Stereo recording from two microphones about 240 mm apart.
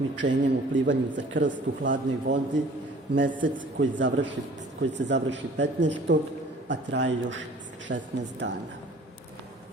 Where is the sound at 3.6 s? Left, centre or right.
Right.